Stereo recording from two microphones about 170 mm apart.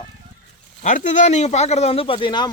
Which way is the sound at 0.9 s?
45° left (ahead or behind).